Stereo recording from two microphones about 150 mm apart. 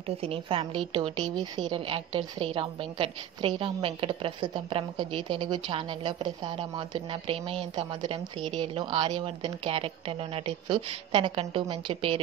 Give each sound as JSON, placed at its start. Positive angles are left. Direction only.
{"t": 0.2, "sound": "a woman's voice", "side_deg": -40}